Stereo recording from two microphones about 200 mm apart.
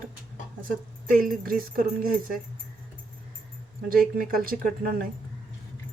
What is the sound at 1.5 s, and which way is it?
Speech, 45° right (ahead or behind).